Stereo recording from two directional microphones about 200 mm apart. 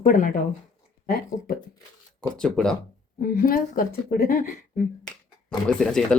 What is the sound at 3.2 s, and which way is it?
Speech, 45° left (ahead or behind).